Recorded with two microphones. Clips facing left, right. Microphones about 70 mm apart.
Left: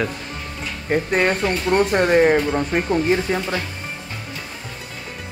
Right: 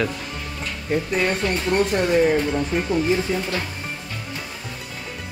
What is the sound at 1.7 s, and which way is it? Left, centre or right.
Speech, left.